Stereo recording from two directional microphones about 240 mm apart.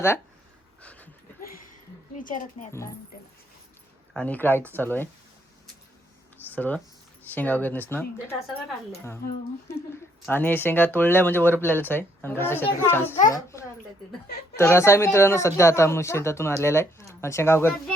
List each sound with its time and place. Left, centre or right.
0.8 s pant: centre
1.4 s a sound: left
2.2 s a woman's voice: left
4.1 s speech: centre
6.5 s speech: centre
10.2 s speech: centre